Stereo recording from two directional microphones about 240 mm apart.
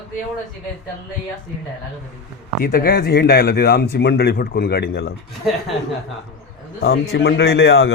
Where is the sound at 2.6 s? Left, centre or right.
Left.